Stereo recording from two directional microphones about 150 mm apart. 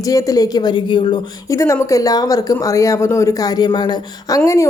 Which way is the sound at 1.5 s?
20° left (ahead or behind).